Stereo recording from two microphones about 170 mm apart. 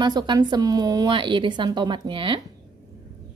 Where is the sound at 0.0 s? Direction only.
25° right (ahead or behind).